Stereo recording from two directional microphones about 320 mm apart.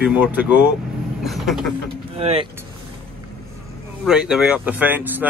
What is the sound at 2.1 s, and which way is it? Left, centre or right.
Speech, centre.